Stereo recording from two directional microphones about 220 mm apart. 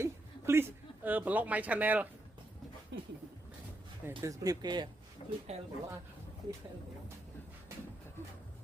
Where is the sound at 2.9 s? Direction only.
55° right (ahead or behind).